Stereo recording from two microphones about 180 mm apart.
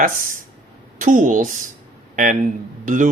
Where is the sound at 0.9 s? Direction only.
45° right (ahead or behind).